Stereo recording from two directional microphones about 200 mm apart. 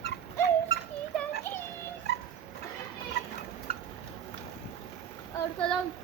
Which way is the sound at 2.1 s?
55° left (ahead or behind).